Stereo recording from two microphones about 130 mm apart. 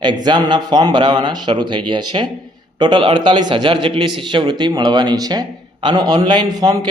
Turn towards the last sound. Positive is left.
turn(degrees=-30)  # may be behind; listen again after turning